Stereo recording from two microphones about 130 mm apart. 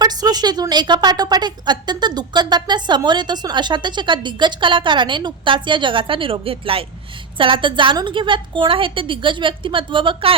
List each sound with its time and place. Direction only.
0.0 s a woman's voice: 30° right (ahead or behind)